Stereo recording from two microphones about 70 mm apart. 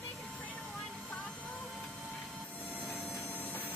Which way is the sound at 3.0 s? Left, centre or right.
Left.